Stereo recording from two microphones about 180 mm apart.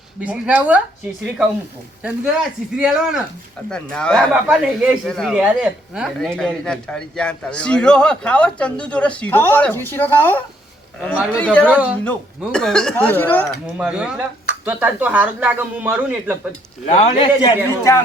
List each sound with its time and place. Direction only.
0.2 s speech: 5° right (ahead or behind)
2.0 s speech: 5° right (ahead or behind); by 13.5 s 10° left (ahead or behind)
13.7 s speech: 5° right (ahead or behind)
16.8 s speech: 35° left (ahead or behind)
17.9 s speech: 15° left (ahead or behind)